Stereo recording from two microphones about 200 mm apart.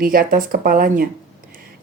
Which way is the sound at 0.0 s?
45° right (ahead or behind).